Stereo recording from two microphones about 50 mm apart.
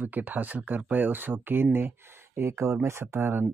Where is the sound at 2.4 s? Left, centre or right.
Right.